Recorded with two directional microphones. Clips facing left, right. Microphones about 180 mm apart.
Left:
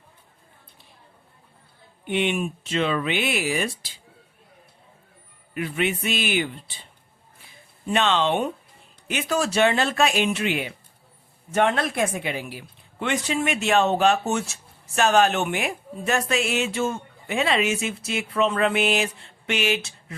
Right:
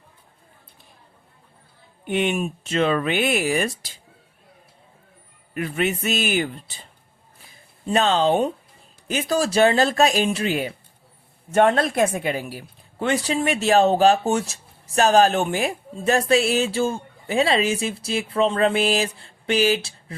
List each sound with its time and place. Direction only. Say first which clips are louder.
2.0 s speech: right 2 dB; 45° right (ahead or behind)
5.5 s speech: right 2 dB; 45° right (ahead or behind)
7.9 s a woman's voice: right 3 dB; 40° right (ahead or behind)